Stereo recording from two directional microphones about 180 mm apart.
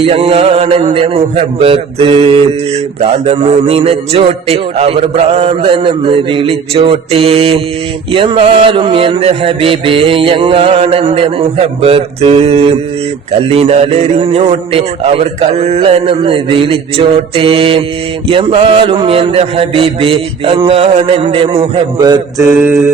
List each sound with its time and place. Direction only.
0.0 s mantra: 35° right (ahead or behind); by 22.8 s 15° right (ahead or behind)